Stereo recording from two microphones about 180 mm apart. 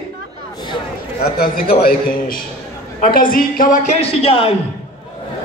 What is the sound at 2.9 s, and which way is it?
A woman's voice, 50° left (ahead or behind).